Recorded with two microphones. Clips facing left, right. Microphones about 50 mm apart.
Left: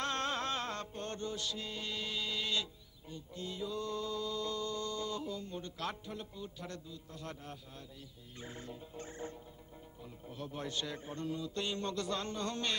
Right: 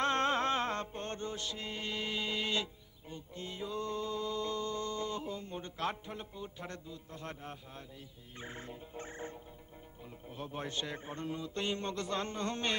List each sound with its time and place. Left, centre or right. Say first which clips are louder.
0.0 s music: right 5 dB; right
8.4 s a man's voice: right 1 dB; right